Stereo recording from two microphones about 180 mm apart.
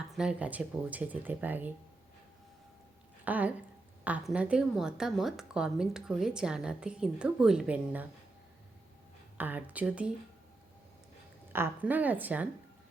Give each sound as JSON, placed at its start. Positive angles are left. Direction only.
{"t": 0.2, "sound": "speech", "side_deg": -5}
{"t": 3.2, "sound": "speech", "side_deg": -10}
{"t": 9.4, "sound": "speech", "side_deg": -10}
{"t": 11.5, "sound": "speech", "side_deg": -10}